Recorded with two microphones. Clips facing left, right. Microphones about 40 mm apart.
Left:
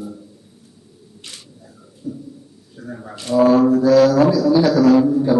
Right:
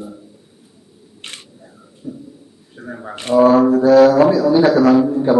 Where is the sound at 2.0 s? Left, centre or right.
Right.